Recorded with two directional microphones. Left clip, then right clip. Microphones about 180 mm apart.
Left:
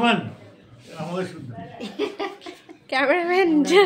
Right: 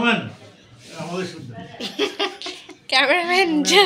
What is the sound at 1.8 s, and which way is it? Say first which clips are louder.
Laughter: right 5 dB; 30° right (ahead or behind).